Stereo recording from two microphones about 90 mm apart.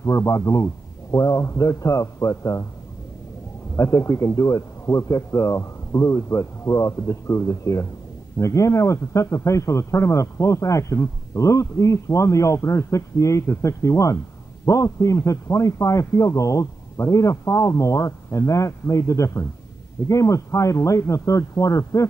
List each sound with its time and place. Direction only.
0.0 s a man's voice: 35° left (ahead or behind)
3.7 s a man's voice: 35° left (ahead or behind)